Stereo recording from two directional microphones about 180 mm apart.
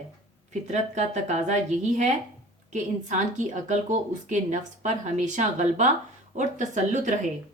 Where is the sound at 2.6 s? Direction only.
40° right (ahead or behind).